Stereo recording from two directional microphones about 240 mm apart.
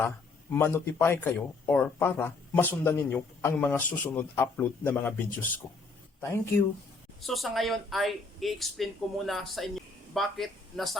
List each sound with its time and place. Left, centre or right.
0.5 s speech: centre